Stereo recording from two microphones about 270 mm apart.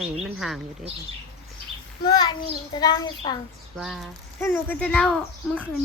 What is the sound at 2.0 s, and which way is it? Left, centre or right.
A child's voice, centre.